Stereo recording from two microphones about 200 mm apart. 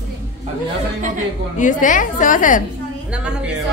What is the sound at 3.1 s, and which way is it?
Speech, 5° right (ahead or behind).